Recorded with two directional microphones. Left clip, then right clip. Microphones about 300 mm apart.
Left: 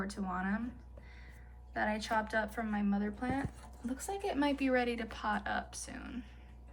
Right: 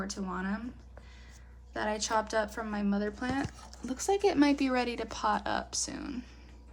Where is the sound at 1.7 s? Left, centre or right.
Centre.